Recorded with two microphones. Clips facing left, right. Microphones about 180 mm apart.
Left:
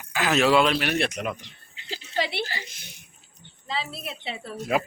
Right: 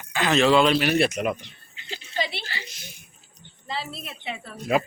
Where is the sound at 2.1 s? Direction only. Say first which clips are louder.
Left 2 dB; 60° left (ahead or behind).